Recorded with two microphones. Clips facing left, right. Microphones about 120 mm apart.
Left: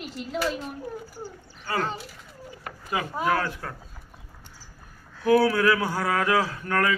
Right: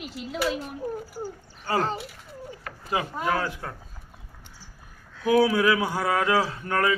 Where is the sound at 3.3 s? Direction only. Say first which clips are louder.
Even; 15° right (ahead or behind).